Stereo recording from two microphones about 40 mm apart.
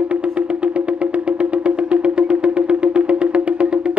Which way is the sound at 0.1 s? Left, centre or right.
Right.